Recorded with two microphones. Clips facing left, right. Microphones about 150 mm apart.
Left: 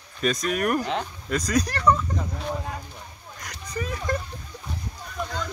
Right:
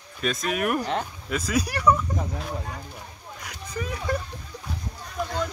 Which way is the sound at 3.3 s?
5° right (ahead or behind).